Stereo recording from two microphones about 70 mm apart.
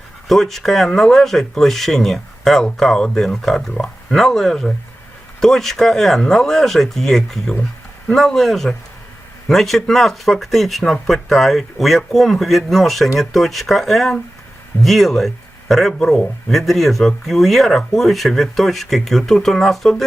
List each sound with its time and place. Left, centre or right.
0.3 s speech: centre